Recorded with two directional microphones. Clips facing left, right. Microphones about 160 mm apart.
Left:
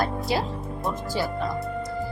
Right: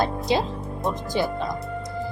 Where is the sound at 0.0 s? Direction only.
20° right (ahead or behind).